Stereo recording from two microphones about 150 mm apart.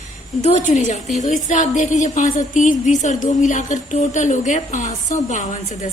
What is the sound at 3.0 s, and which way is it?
A woman's voice, 55° left (ahead or behind).